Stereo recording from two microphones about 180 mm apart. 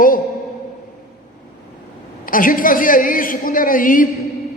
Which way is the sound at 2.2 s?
50° left (ahead or behind).